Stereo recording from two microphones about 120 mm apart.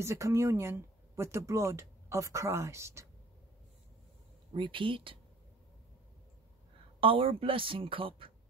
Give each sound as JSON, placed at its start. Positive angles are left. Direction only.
{"t": 0.0, "sound": "speech", "side_deg": -25}
{"t": 4.6, "sound": "a woman's voice", "side_deg": -45}
{"t": 7.0, "sound": "a woman's voice", "side_deg": -50}